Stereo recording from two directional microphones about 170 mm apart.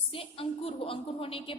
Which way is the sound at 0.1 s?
35° left (ahead or behind).